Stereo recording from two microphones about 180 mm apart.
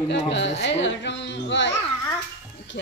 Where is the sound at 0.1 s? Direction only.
80° left.